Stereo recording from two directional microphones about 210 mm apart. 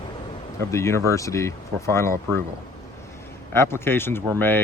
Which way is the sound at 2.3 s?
15° right (ahead or behind).